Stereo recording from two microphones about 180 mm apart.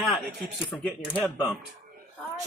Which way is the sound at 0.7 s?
5° left (ahead or behind).